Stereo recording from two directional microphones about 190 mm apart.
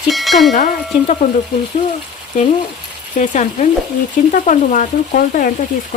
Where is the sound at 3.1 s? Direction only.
40° left (ahead or behind).